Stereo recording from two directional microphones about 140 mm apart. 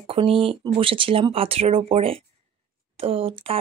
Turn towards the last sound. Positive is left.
turn(degrees=-40)  # may be behind; listen again after turning